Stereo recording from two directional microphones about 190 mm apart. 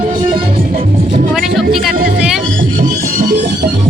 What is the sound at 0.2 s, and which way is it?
Music, 25° right (ahead or behind).